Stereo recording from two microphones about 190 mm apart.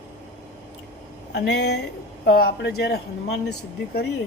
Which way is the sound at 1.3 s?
65° left (ahead or behind).